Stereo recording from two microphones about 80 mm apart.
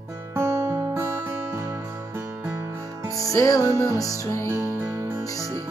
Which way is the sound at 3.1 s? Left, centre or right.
Left.